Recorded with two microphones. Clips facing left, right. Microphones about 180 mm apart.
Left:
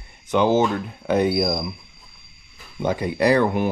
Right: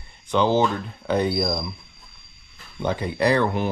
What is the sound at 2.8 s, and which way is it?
Speech, 15° left (ahead or behind).